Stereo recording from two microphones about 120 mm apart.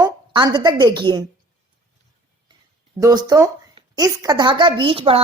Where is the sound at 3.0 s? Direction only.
30° right (ahead or behind); by 5.2 s 50° right (ahead or behind).